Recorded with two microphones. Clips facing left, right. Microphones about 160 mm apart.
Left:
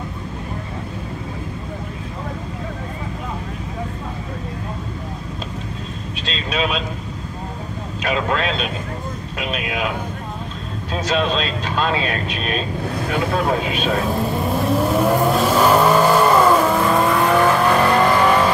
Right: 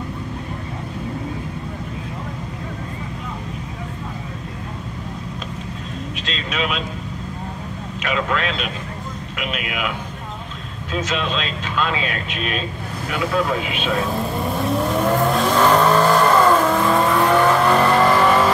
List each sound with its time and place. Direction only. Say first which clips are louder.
6.2 s speech: left 3 dB; 35° left (ahead or behind)
8.0 s speech: left 2 dB; 35° left (ahead or behind)
10.9 s speech: left 3 dB; 35° left (ahead or behind)
14.1 s vehicle: left 2 dB; centre (ahead or behind)